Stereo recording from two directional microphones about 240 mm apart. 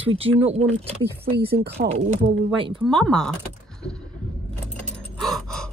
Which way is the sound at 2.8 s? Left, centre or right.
Centre.